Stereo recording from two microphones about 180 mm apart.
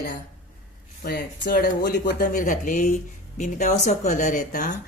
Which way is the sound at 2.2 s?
45° left (ahead or behind).